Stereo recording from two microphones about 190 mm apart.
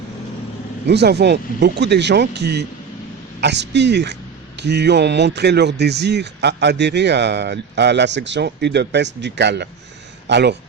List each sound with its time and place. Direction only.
0.9 s speech: 60° right (ahead or behind)